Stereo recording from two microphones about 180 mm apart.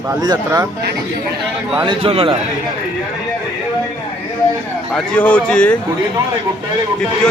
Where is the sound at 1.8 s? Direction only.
30° right (ahead or behind).